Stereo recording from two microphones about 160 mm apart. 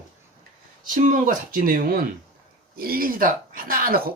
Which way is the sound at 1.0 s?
55° right (ahead or behind).